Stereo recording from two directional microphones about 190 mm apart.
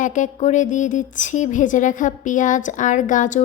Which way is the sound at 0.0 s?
40° left (ahead or behind).